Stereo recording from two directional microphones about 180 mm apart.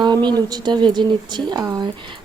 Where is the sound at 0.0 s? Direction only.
25° right (ahead or behind).